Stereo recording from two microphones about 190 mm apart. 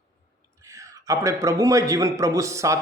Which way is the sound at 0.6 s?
15° right (ahead or behind).